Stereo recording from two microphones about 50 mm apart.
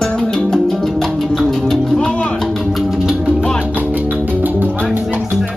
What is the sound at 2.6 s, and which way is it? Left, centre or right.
Music, centre.